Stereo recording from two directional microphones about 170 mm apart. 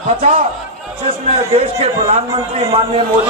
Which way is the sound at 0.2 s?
50° right (ahead or behind).